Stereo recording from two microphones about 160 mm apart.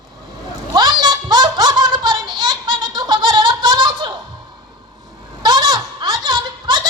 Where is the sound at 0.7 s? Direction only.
25° right (ahead or behind).